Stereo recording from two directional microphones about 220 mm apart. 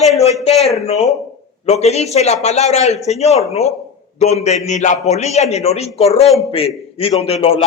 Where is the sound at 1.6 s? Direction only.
30° left (ahead or behind).